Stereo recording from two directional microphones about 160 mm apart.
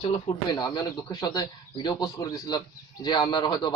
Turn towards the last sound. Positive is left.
turn(degrees=25)  # may be behind; listen again after turning